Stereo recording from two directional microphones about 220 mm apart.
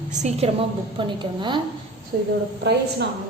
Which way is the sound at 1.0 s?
20° right (ahead or behind).